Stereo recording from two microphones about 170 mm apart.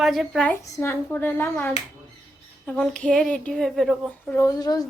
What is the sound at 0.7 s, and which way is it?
A woman's voice, 15° left (ahead or behind).